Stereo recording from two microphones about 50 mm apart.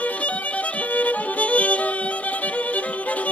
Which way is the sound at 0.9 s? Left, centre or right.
Left.